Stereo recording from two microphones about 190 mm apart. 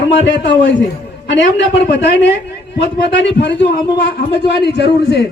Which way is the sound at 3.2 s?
65° left (ahead or behind).